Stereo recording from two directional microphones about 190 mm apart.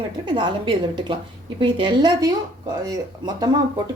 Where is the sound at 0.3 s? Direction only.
25° right (ahead or behind).